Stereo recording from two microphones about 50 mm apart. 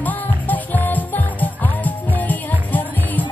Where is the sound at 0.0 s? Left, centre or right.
Left.